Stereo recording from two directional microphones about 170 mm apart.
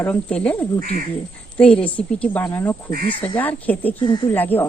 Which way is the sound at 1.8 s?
10° left (ahead or behind).